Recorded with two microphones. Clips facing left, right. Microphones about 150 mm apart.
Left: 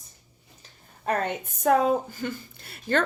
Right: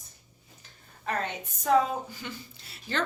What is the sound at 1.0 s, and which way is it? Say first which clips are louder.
A woman's voice: left 5 dB; 55° left (ahead or behind).